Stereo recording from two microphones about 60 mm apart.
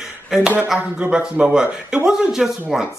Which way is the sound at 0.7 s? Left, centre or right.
Right.